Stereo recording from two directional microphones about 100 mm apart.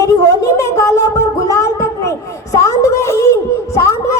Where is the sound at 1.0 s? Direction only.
30° left (ahead or behind).